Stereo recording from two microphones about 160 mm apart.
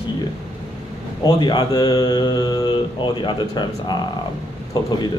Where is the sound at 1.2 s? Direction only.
25° left (ahead or behind).